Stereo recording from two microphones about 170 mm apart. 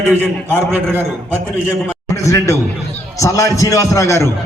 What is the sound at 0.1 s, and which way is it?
Speech, 10° left (ahead or behind).